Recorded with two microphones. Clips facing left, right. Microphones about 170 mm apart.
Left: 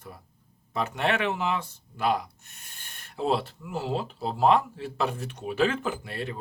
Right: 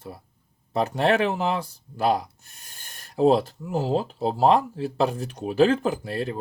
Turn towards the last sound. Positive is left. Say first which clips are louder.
# right 6 dB
turn(degrees=-35)  # may be behind; listen again after turning